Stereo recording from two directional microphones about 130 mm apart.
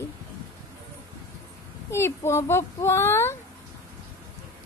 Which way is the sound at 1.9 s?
20° left (ahead or behind).